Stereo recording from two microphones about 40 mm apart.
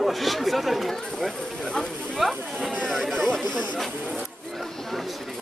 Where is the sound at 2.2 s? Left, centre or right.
Centre.